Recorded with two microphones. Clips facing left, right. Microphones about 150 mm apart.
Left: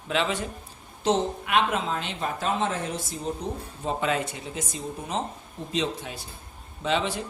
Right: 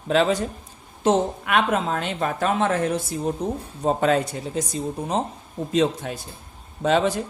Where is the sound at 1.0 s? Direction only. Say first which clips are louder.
Right 4 dB; 50° right (ahead or behind).